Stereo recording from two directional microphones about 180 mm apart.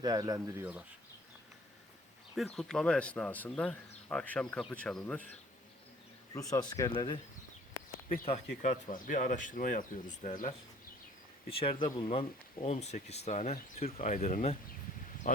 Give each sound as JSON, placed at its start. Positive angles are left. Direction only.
{"t": 0.0, "sound": "speech", "side_deg": -20}
{"t": 2.3, "sound": "speech", "side_deg": 0}
{"t": 6.3, "sound": "speech", "side_deg": 20}
{"t": 7.7, "sound": "a sound", "side_deg": 50}
{"t": 8.6, "sound": "speech", "side_deg": 45}
{"t": 11.4, "sound": "speech", "side_deg": 30}